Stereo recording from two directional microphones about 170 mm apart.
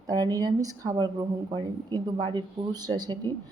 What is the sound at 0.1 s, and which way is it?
Speech, 20° right (ahead or behind).